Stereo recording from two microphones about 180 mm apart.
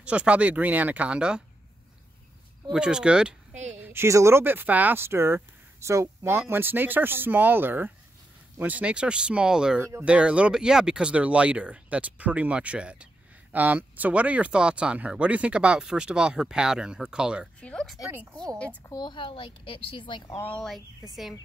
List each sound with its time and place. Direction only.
0.0 s speech: 5° right (ahead or behind)
2.7 s speech: 5° right (ahead or behind)
3.5 s a woman's voice: 40° right (ahead or behind)
3.8 s speech: 15° right (ahead or behind); by 17.9 s 5° left (ahead or behind)
18.9 s speech: 25° left (ahead or behind)
20.4 s speech: 5° left (ahead or behind)